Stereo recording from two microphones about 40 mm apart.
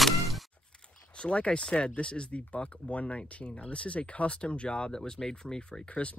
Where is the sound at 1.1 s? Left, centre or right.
Left.